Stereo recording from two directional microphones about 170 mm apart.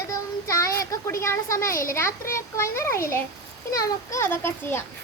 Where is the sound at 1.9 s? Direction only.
15° left (ahead or behind).